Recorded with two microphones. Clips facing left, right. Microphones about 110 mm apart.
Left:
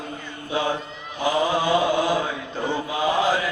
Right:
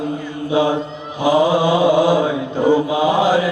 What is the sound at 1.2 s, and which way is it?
Mantra, 15° right (ahead or behind).